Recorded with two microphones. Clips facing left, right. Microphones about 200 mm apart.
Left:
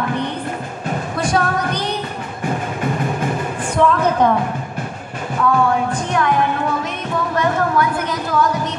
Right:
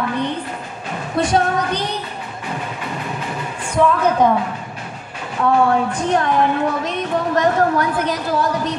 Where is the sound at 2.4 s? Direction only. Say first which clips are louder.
Left 6 dB; 50° left (ahead or behind).